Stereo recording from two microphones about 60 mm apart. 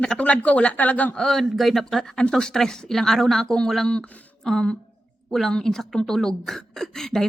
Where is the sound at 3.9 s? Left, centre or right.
Left.